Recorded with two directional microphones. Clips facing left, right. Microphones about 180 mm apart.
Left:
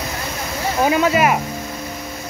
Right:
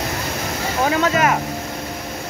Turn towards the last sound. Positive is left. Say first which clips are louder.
# left 2 dB
turn(degrees=10)  # may be behind; listen again after turning